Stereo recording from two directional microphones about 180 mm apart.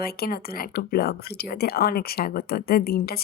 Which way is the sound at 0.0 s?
55° left (ahead or behind).